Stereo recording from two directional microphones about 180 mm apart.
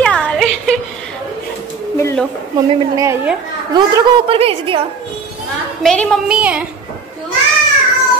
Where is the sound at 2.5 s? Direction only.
15° right (ahead or behind).